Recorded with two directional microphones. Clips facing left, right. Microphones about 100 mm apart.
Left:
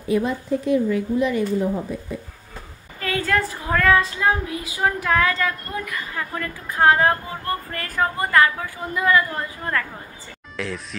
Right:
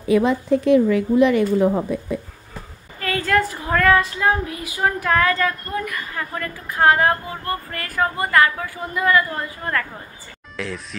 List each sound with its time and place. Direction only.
0.1 s a woman's voice: 90° right; by 2.1 s 70° right (ahead or behind)
3.0 s a woman's voice: 20° left (ahead or behind)
10.5 s speech: centre (ahead or behind)